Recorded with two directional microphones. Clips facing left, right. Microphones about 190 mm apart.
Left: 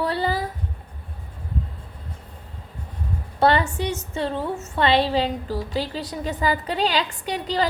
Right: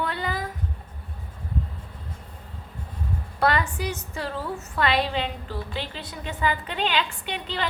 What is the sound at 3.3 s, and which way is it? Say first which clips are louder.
A woman's voice: left 5 dB; 30° left (ahead or behind).